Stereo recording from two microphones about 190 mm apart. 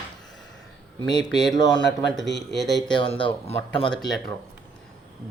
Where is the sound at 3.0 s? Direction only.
25° left (ahead or behind).